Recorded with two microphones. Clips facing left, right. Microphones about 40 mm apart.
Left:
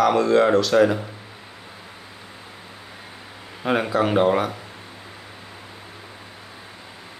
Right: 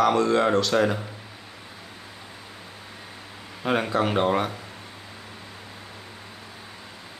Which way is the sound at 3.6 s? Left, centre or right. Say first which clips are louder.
Left 3 dB; centre.